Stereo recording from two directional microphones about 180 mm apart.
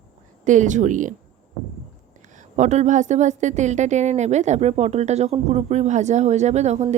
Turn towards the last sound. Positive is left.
turn(degrees=-40)  # may be behind; listen again after turning